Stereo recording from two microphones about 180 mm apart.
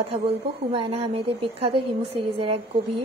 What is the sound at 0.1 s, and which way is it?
Speech, 35° right (ahead or behind).